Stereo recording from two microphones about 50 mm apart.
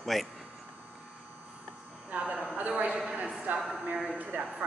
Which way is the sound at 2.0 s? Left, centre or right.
Right.